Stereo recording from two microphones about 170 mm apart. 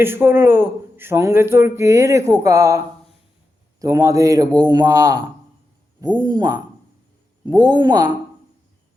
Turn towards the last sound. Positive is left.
turn(degrees=-25)  # may be behind; listen again after turning